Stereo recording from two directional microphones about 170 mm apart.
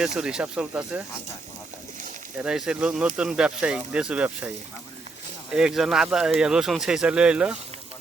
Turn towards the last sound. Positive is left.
turn(degrees=-5)  # may be behind; listen again after turning